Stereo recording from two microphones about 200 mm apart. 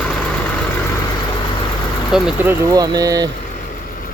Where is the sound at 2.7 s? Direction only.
20° right (ahead or behind).